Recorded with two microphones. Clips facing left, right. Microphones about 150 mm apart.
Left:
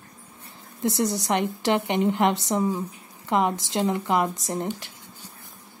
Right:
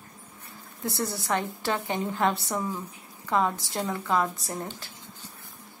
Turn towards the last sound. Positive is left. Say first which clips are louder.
# left 6 dB
turn(degrees=20)  # may be behind; listen again after turning